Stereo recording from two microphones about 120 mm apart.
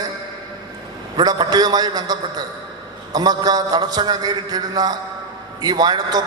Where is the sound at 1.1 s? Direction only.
35° right (ahead or behind).